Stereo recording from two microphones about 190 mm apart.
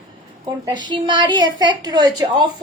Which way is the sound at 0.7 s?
25° right (ahead or behind).